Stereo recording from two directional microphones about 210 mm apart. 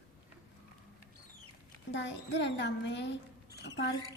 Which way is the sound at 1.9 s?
55° left (ahead or behind).